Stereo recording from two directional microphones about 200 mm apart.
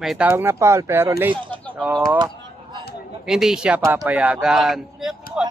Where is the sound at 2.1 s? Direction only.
20° right (ahead or behind).